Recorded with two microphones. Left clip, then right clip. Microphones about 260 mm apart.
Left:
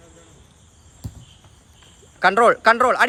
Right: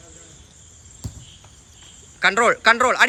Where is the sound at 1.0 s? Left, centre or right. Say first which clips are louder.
Right 2 dB; centre.